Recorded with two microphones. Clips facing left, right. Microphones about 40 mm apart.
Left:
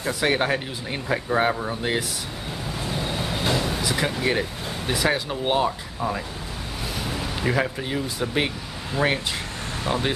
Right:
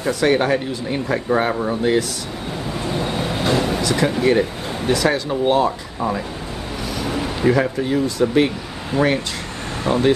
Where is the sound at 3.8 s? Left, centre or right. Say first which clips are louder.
Right 6 dB; centre.